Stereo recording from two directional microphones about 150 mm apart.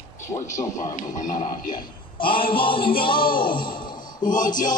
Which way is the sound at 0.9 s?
55° left (ahead or behind).